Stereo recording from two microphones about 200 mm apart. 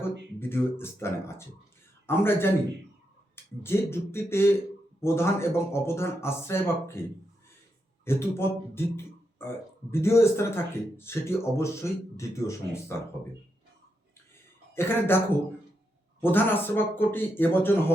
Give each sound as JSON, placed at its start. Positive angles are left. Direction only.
{"t": 0.3, "sound": "speech", "side_deg": 10}
{"t": 8.0, "sound": "a man's voice", "side_deg": 10}
{"t": 14.7, "sound": "speech", "side_deg": 10}
{"t": 16.2, "sound": "speech", "side_deg": 10}